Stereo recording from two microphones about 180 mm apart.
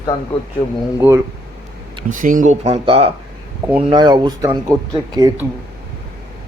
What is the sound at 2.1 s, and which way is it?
Speech, 50° right (ahead or behind).